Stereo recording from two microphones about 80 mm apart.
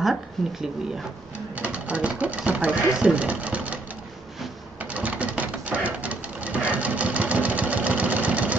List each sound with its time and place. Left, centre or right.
0.0 s speech: centre
1.5 s speech: centre
4.9 s sewing machine: centre